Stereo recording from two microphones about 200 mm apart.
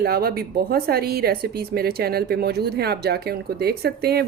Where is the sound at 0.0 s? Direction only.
50° right (ahead or behind).